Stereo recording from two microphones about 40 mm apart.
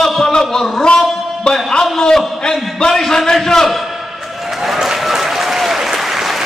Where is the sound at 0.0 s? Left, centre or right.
Centre.